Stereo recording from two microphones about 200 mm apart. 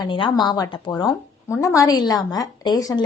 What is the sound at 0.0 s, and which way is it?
A woman's voice, 25° left (ahead or behind).